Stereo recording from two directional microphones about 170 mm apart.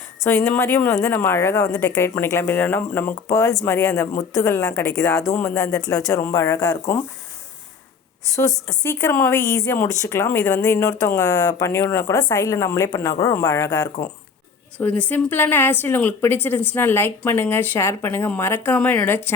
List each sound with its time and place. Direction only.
0.3 s speech: 15° left (ahead or behind)
8.4 s a woman's voice: 15° left (ahead or behind)